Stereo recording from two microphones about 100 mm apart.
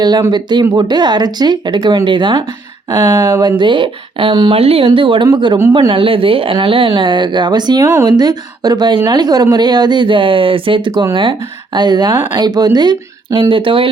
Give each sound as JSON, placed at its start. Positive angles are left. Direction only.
{"t": 0.3, "sound": "speech", "side_deg": -45}
{"t": 4.5, "sound": "speech", "side_deg": -75}
{"t": 4.9, "sound": "speech", "side_deg": -55}
{"t": 5.9, "sound": "speech", "side_deg": -60}
{"t": 13.5, "sound": "speech", "side_deg": -60}